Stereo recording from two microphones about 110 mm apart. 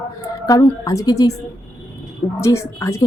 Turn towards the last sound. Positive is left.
turn(degrees=25)  # may be behind; listen again after turning